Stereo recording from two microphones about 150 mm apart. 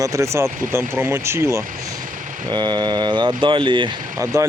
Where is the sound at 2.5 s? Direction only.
30° right (ahead or behind).